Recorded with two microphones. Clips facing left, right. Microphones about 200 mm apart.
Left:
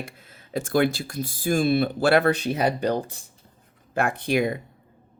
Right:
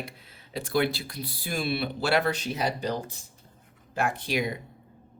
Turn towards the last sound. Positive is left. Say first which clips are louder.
# left 5 dB
turn(degrees=55)  # may be behind; listen again after turning